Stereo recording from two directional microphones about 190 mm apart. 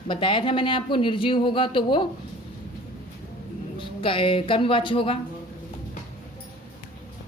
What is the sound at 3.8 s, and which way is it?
A woman's voice, 25° left (ahead or behind).